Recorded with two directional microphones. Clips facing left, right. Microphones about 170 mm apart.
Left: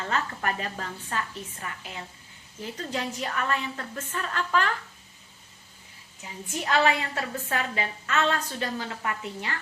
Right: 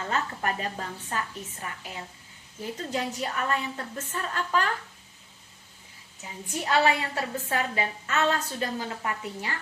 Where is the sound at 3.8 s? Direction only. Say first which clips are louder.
Even; 20° right (ahead or behind).